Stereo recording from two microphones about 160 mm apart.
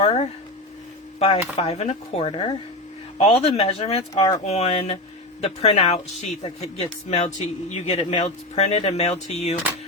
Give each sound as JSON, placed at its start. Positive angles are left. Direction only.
{"t": 0.0, "sound": "a sound", "side_deg": 35}
{"t": 1.2, "sound": "speech", "side_deg": 40}
{"t": 4.1, "sound": "speech", "side_deg": 25}
{"t": 4.4, "sound": "speech", "side_deg": 40}